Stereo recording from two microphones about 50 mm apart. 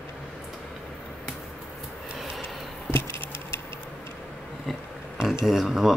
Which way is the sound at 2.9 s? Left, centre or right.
Left.